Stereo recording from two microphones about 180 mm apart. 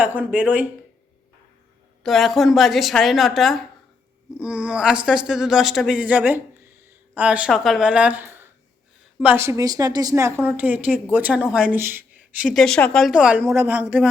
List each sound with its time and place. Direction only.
0.0 s speech: 10° right (ahead or behind)
2.0 s a woman's voice: centre (ahead or behind)
12.5 s speech: 5° left (ahead or behind)